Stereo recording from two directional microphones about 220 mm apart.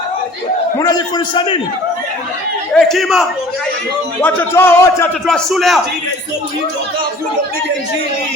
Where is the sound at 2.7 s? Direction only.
Centre (ahead or behind).